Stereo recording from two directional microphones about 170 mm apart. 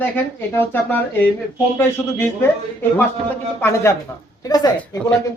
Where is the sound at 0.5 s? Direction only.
10° left (ahead or behind).